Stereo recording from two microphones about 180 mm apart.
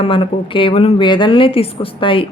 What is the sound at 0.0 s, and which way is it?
Speech, 30° left (ahead or behind).